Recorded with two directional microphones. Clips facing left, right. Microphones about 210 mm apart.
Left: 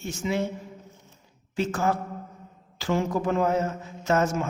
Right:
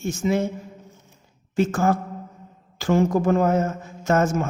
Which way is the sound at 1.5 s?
50° right (ahead or behind).